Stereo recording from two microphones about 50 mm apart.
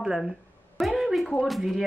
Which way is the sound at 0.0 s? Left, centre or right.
Centre.